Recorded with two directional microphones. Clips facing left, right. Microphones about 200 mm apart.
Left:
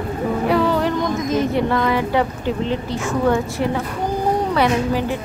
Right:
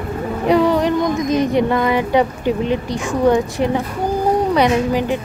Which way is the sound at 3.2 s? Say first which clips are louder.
Right 5 dB; 20° right (ahead or behind).